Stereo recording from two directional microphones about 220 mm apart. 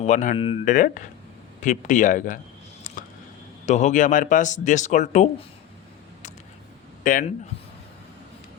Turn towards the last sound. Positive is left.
turn(degrees=35)  # may be behind; listen again after turning